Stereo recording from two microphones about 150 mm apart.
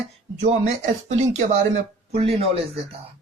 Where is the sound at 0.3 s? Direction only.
50° right (ahead or behind).